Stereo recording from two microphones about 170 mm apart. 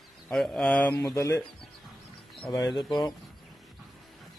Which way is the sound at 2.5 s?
20° left (ahead or behind).